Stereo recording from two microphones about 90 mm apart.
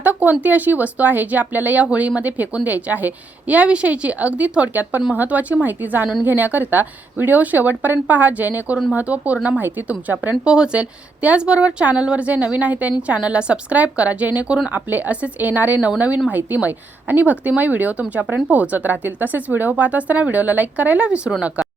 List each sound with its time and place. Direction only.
0.0 s speech: 20° right (ahead or behind)